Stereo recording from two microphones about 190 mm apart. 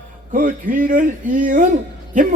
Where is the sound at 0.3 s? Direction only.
45° right (ahead or behind).